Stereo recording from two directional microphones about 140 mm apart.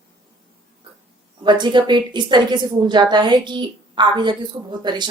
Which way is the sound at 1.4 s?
35° right (ahead or behind).